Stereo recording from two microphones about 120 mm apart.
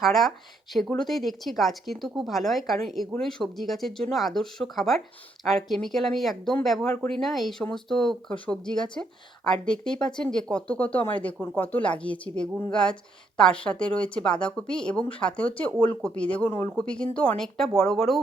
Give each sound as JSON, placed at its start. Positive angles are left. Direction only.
{"t": 0.0, "sound": "speech", "side_deg": 0}
{"t": 16.5, "sound": "speech", "side_deg": 25}
{"t": 16.7, "sound": "speech", "side_deg": 10}